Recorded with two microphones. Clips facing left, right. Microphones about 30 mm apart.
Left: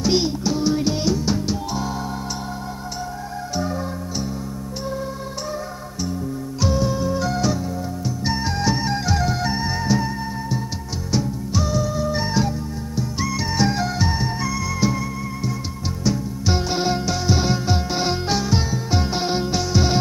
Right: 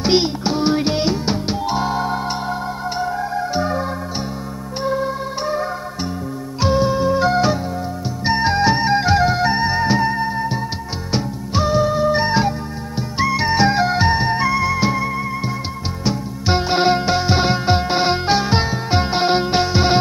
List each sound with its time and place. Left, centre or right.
0.0 s music: right
3.5 s music: right
4.8 s music: right
6.6 s music: right